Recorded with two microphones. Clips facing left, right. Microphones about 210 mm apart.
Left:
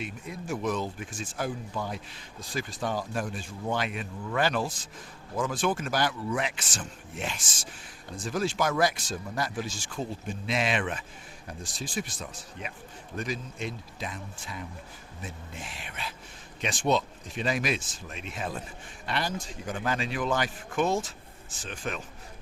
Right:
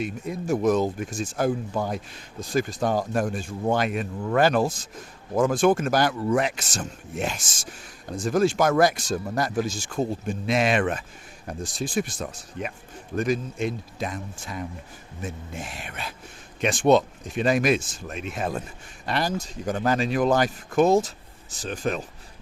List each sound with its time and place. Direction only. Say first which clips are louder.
0.0 s speech: right 8 dB; 40° right (ahead or behind)